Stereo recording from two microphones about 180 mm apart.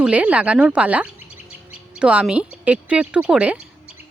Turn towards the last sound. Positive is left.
turn(degrees=-5)  # may be behind; listen again after turning